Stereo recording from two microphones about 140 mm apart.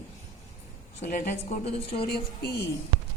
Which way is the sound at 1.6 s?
45° left (ahead or behind).